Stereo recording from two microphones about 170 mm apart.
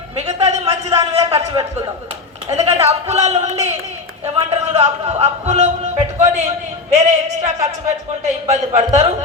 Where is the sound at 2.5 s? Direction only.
40° right (ahead or behind).